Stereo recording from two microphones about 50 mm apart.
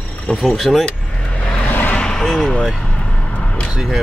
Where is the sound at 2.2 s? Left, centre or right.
Centre.